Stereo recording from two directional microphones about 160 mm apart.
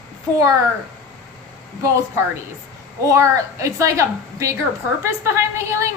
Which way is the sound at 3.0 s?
20° right (ahead or behind).